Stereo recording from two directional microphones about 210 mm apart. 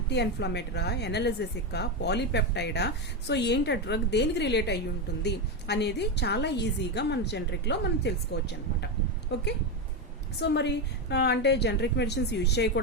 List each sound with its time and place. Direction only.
0.1 s a woman's voice: 50° left (ahead or behind)